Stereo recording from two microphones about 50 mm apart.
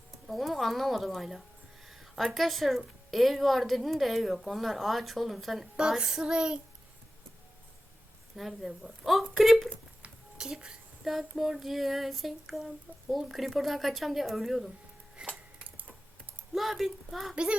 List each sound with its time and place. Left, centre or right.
0.3 s speech: centre
6.0 s child singing: centre
8.4 s speech: centre
10.3 s a woman's voice: centre
11.0 s speech: centre
15.2 s a sound: right
16.6 s speech: centre
17.3 s a child's voice: right